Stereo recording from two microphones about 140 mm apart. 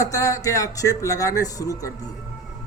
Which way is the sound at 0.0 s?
20° left (ahead or behind).